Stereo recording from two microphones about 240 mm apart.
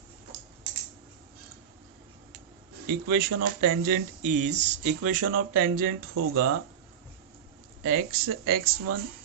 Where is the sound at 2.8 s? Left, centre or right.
Right.